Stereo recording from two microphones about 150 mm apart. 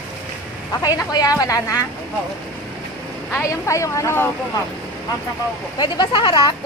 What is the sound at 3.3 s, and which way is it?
Speech, 20° left (ahead or behind).